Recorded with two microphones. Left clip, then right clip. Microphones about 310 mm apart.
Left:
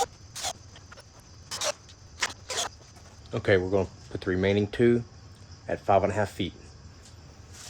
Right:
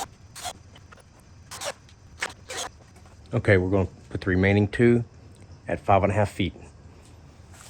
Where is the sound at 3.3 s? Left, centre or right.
Right.